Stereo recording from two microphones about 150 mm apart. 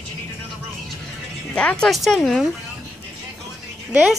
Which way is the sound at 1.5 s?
5° left (ahead or behind).